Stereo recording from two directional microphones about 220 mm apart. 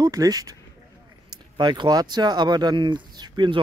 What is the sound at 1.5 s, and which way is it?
Speech, 20° right (ahead or behind).